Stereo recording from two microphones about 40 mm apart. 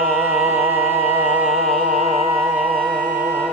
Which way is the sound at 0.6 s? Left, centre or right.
Right.